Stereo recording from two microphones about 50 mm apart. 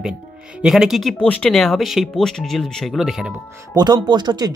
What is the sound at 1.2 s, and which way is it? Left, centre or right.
Speech, left.